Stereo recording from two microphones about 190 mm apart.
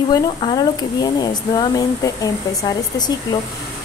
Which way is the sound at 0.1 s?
20° left (ahead or behind).